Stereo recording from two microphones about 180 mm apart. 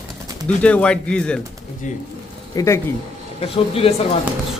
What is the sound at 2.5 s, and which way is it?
Speech, 20° left (ahead or behind).